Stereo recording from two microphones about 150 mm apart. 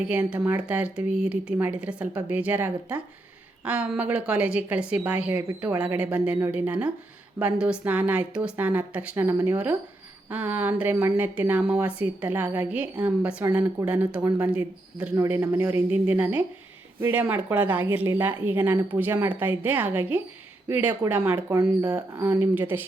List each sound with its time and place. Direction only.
0.0 s a woman's voice: 10° right (ahead or behind)